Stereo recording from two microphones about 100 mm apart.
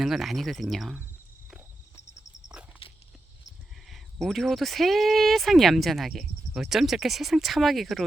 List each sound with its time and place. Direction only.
0.0 s speech: centre (ahead or behind)
2.8 s dog: 65° left (ahead or behind)
3.8 s speech: centre (ahead or behind)